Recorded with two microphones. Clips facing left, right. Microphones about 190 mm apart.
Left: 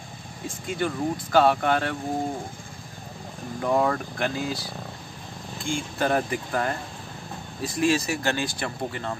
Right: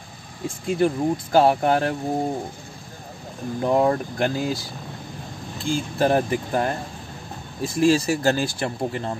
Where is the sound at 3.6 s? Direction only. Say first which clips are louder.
Right 4 dB; 25° right (ahead or behind).